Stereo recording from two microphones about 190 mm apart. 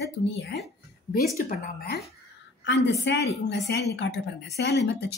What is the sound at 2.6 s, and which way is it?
Speech, 65° left (ahead or behind).